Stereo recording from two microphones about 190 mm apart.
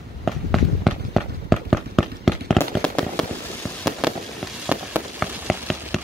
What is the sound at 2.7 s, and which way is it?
Fireworks, 5° left (ahead or behind).